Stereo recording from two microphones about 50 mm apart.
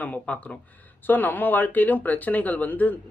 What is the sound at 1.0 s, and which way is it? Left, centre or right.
Speech, left.